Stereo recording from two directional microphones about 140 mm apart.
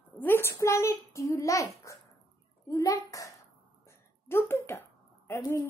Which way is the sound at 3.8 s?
15° left (ahead or behind).